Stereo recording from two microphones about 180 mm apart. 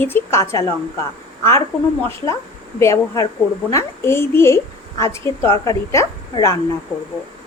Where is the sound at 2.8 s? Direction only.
20° left (ahead or behind).